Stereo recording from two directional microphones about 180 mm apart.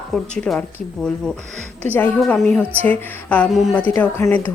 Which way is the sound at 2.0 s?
10° left (ahead or behind).